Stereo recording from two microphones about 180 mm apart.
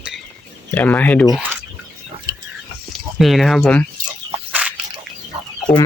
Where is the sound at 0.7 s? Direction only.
10° left (ahead or behind).